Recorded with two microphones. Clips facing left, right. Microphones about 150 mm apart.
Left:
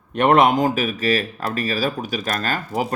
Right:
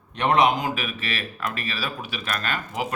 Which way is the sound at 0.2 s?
55° left (ahead or behind).